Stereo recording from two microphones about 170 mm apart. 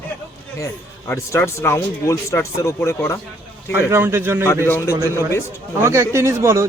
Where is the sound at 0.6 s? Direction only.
15° left (ahead or behind).